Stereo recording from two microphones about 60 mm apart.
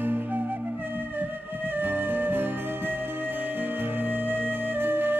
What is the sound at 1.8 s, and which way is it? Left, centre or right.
Music, right.